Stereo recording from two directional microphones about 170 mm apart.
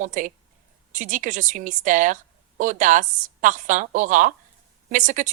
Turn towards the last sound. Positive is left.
turn(degrees=-50)  # may be behind; listen again after turning